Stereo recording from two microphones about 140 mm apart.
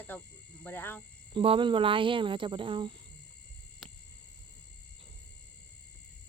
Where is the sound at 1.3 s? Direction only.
40° right (ahead or behind).